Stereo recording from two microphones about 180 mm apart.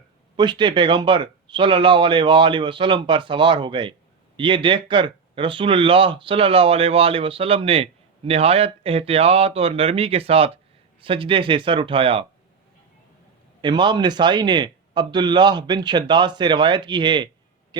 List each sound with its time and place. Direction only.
0.3 s speech: 25° right (ahead or behind)
13.6 s speech: 25° right (ahead or behind)